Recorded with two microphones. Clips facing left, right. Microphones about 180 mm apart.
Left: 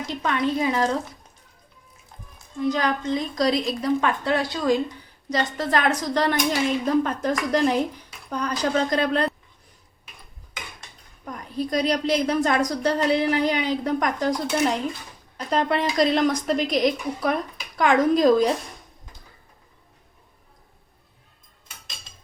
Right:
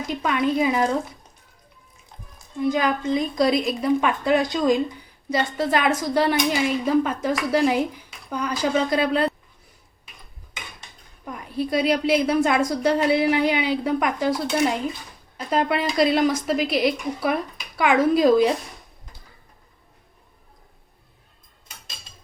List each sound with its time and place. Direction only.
0.1 s speech: 10° right (ahead or behind)
2.6 s speech: 10° right (ahead or behind)
11.3 s speech: 5° right (ahead or behind)